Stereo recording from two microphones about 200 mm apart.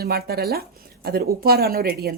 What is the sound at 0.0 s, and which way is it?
A woman's voice, 50° right (ahead or behind).